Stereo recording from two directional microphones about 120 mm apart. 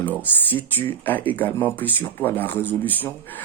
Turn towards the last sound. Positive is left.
turn(degrees=15)  # may be behind; listen again after turning